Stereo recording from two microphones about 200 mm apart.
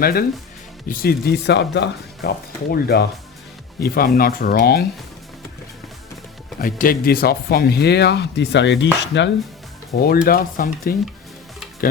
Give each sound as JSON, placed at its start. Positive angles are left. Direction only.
{"t": 0.0, "sound": "speech", "side_deg": 50}
{"t": 6.6, "sound": "speech", "side_deg": 45}
{"t": 10.0, "sound": "speech", "side_deg": 50}